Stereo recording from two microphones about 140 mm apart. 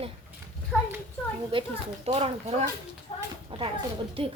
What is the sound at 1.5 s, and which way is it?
A child's voice, 40° right (ahead or behind).